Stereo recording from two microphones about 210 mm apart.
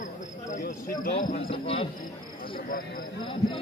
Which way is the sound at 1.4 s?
25° left (ahead or behind).